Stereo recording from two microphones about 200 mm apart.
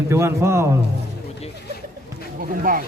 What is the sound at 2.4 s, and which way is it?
Speech, 45° right (ahead or behind).